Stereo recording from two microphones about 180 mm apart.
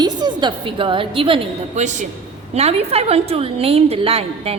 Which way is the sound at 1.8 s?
40° right (ahead or behind).